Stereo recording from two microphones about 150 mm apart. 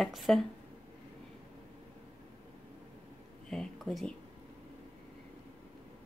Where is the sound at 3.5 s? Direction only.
Centre (ahead or behind).